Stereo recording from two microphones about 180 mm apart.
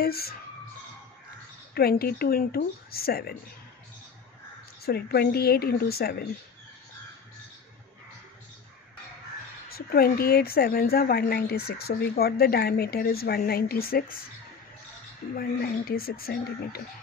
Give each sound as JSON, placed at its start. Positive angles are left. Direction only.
{"t": 0.0, "sound": "a woman's voice", "side_deg": 60}
{"t": 1.7, "sound": "a woman's voice", "side_deg": 60}
{"t": 4.8, "sound": "a woman's voice", "side_deg": 60}
{"t": 9.7, "sound": "a woman's voice", "side_deg": 55}
{"t": 15.3, "sound": "a woman's voice", "side_deg": 55}